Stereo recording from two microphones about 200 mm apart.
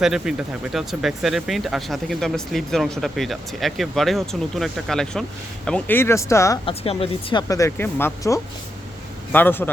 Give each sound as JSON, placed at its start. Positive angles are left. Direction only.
{"t": 0.0, "sound": "speech", "side_deg": -5}
{"t": 6.7, "sound": "speech", "side_deg": 25}
{"t": 7.4, "sound": "speech", "side_deg": 15}